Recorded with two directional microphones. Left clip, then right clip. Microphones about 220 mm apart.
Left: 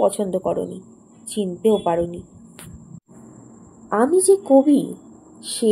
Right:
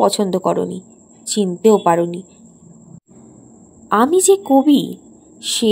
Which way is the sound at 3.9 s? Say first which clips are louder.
Right 3 dB; 35° right (ahead or behind).